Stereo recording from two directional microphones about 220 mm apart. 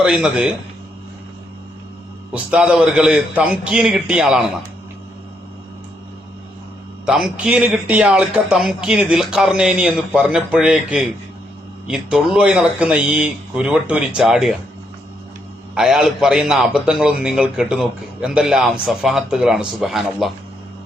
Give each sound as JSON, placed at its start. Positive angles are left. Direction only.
{"t": 0.0, "sound": "a man's voice", "side_deg": -5}
{"t": 2.3, "sound": "a man's voice", "side_deg": -5}
{"t": 7.0, "sound": "a man's voice", "side_deg": 0}
{"t": 15.7, "sound": "a man's voice", "side_deg": 0}